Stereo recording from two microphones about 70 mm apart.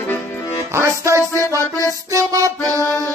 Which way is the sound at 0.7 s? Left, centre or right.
Right.